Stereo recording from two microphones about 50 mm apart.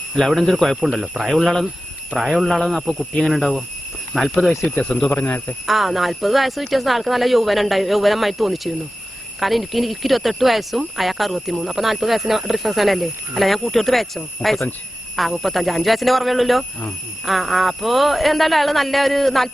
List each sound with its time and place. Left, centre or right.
0.2 s speech: centre
1.3 s speech: centre
4.7 s speech: left
5.2 s speech: left
5.6 s speech: centre